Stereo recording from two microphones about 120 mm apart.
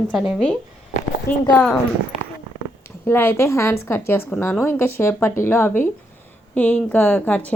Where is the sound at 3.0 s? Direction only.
20° left (ahead or behind).